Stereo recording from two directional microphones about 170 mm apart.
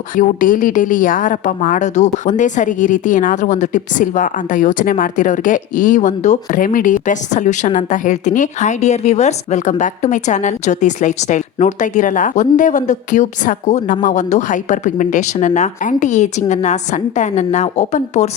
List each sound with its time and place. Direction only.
0.2 s a woman's voice: 50° left (ahead or behind)